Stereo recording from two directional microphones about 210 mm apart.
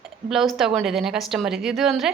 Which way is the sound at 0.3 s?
Centre (ahead or behind).